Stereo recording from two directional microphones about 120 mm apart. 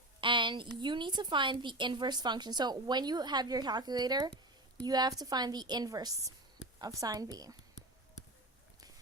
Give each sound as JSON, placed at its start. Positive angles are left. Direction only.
{"t": 0.2, "sound": "a woman's voice", "side_deg": -40}